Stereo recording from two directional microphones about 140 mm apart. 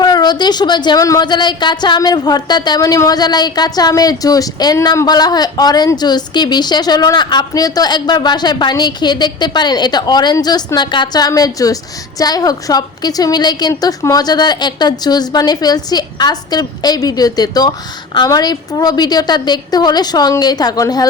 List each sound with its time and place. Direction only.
0.0 s a woman's voice: 30° left (ahead or behind)